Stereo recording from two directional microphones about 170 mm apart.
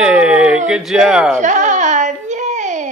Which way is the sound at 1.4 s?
45° right (ahead or behind).